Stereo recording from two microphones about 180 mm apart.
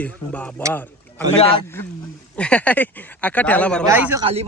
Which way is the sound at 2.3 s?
5° left (ahead or behind).